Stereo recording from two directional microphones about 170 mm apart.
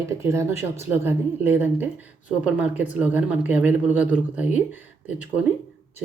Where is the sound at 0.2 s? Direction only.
15° right (ahead or behind).